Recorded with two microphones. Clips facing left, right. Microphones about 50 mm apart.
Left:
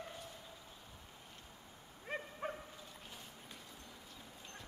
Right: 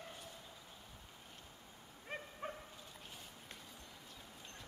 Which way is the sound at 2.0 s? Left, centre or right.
Centre.